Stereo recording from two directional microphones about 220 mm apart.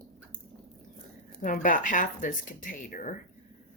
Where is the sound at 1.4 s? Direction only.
35° left (ahead or behind).